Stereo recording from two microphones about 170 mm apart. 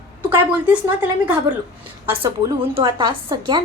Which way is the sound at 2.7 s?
30° right (ahead or behind).